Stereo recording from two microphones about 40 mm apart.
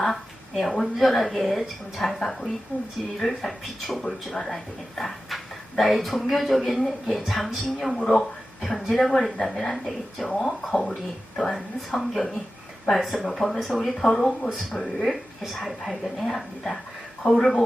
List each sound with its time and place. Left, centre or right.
0.0 s speech: centre
9.7 s speech: centre